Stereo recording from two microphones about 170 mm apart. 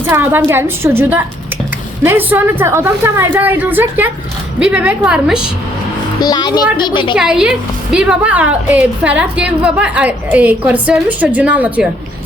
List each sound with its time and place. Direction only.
0.0 s a woman's voice: 15° right (ahead or behind)
6.1 s a child's voice: 25° left (ahead or behind)
7.2 s a woman's voice: 5° right (ahead or behind)